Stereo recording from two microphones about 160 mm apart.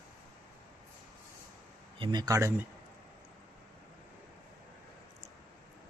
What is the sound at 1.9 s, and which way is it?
Speech, 30° right (ahead or behind).